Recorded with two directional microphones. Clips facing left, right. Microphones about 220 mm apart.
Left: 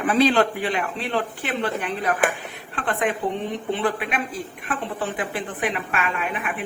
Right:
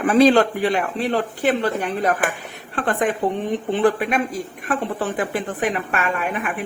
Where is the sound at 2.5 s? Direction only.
45° right (ahead or behind).